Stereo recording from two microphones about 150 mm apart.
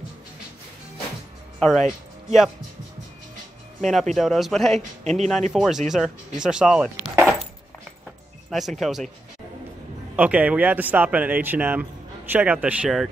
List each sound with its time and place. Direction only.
1.6 s speech: centre (ahead or behind)
3.8 s speech: centre (ahead or behind)
5.0 s speech: 50° right (ahead or behind)
5.5 s speech: centre (ahead or behind)
8.5 s speech: centre (ahead or behind)
10.1 s speech: 10° right (ahead or behind)